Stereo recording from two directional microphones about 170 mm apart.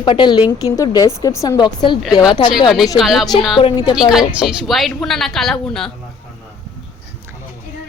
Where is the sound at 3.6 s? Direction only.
30° left (ahead or behind).